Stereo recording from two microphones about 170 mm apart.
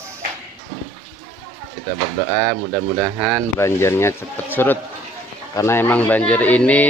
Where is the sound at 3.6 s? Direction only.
15° left (ahead or behind).